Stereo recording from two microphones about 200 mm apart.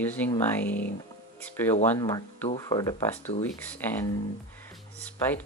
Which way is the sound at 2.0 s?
20° left (ahead or behind).